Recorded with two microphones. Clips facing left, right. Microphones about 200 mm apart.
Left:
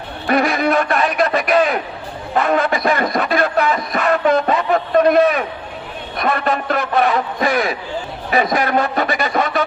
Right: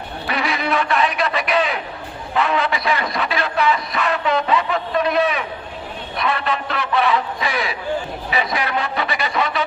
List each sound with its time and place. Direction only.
0.3 s speech: 45° left (ahead or behind)